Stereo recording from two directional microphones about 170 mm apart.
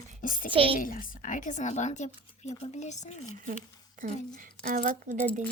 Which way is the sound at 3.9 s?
50° right (ahead or behind).